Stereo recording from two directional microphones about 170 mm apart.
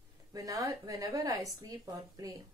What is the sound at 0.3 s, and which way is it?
A woman's voice, 20° right (ahead or behind).